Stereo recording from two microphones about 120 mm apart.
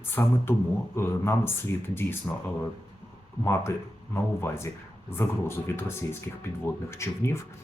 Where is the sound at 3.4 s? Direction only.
20° left (ahead or behind).